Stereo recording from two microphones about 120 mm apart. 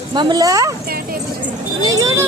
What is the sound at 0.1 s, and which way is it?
Speech, 35° right (ahead or behind).